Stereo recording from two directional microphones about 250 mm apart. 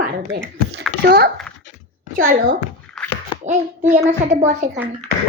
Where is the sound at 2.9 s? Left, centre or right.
Centre.